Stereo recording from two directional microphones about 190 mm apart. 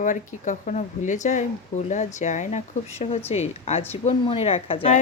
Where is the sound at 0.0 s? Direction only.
40° left (ahead or behind).